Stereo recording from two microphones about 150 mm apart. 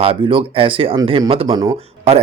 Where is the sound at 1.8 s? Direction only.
40° right (ahead or behind).